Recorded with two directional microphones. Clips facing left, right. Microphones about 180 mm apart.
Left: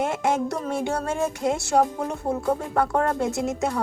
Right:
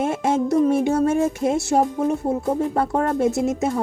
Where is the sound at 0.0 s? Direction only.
25° right (ahead or behind).